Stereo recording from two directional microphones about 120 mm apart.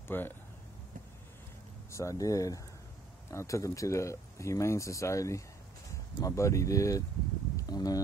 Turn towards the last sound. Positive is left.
turn(degrees=30)  # may be behind; listen again after turning